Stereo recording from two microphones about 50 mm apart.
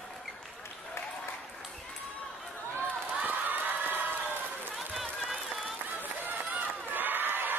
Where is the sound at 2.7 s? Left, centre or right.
Right.